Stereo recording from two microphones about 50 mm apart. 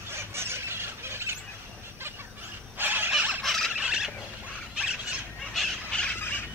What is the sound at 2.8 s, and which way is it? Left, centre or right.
Mechanisms, right.